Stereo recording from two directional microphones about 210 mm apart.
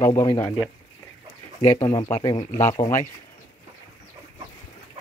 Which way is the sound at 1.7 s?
15° left (ahead or behind).